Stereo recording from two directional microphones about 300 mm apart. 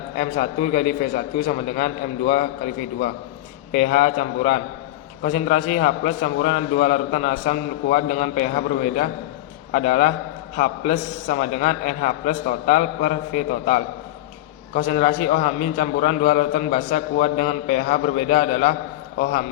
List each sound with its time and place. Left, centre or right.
0.2 s a man's voice: left
3.7 s a man's voice: left